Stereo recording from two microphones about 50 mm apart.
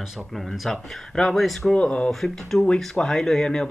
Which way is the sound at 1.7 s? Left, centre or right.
Left.